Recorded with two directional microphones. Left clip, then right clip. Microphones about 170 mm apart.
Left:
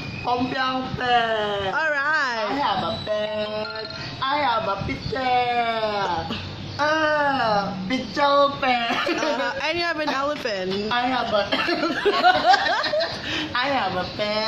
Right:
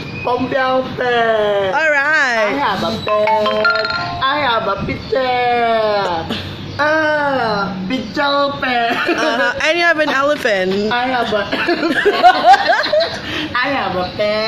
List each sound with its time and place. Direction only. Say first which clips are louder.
0.6 s speech: right 9 dB; 5° left (ahead or behind)
1.7 s a sound: right 8 dB; 15° right (ahead or behind)
3.4 s music: right 14 dB; 55° right (ahead or behind)
5.6 s speech: right 8 dB; 5° left (ahead or behind)
6.8 s crow: right 6 dB; 5° left (ahead or behind)
7.9 s music: right 2 dB; 5° left (ahead or behind)
9.1 s speech: right 8 dB; 15° right (ahead or behind)
12.0 s speech: right 8 dB; 5° right (ahead or behind)
13.6 s speech: right 6 dB; 10° left (ahead or behind)